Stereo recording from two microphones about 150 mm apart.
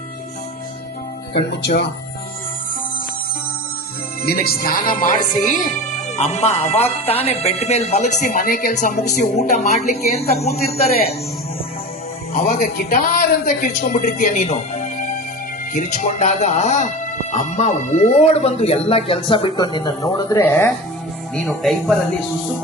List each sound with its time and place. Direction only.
4.2 s speech: 90° left; by 5.6 s 60° left (ahead or behind)
6.1 s speech: 45° left (ahead or behind)
12.5 s a woman's voice: 85° left
14.3 s music: 50° left (ahead or behind)
15.7 s speech: 55° left (ahead or behind); by 20.4 s 25° left (ahead or behind)
20.4 s speech: 10° left (ahead or behind)
21.3 s speech: centre (ahead or behind)